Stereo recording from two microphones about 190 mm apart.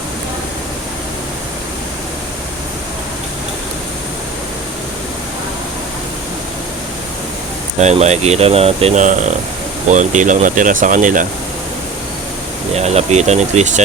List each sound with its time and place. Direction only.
7.8 s speech: 35° right (ahead or behind)
12.7 s speech: 35° right (ahead or behind)